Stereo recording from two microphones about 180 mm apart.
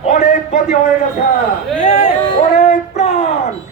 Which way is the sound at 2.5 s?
45° left (ahead or behind).